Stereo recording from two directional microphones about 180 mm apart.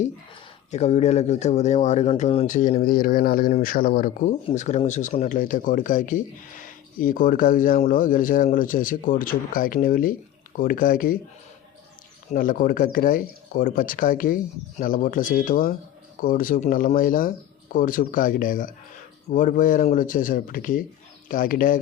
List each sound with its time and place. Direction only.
0.7 s speech: 40° left (ahead or behind)
2.5 s speech: 50° left (ahead or behind)
12.3 s speech: 50° left (ahead or behind)